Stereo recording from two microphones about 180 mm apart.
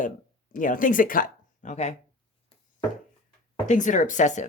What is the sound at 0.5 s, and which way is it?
Speech, 50° left (ahead or behind).